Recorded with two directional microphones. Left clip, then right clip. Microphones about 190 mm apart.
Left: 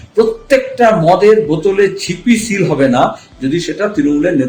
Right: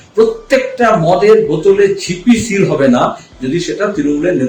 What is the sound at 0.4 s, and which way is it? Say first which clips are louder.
A man's voice: left 1 dB; 50° left (ahead or behind).